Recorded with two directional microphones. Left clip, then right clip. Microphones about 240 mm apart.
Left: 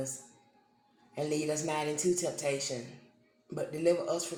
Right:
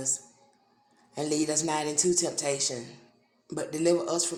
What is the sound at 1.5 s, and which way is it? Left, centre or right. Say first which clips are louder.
Speech: right 4 dB; right.